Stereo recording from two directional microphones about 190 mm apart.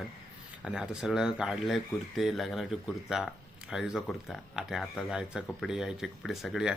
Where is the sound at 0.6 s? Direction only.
5° right (ahead or behind).